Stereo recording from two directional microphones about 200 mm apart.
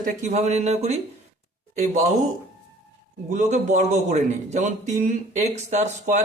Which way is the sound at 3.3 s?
35° right (ahead or behind).